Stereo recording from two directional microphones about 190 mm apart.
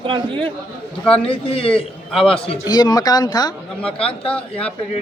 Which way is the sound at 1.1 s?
30° left (ahead or behind).